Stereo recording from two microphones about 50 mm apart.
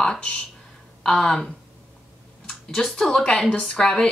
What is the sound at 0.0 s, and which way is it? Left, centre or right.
Speech, centre.